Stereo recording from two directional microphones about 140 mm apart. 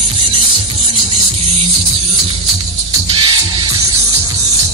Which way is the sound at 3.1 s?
40° right (ahead or behind).